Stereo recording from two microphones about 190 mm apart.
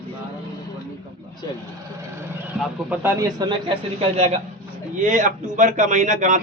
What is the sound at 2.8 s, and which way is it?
A man's voice, 15° right (ahead or behind).